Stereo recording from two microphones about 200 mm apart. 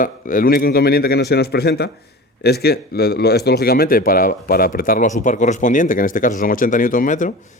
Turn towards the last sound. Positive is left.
turn(degrees=40)  # may be behind; listen again after turning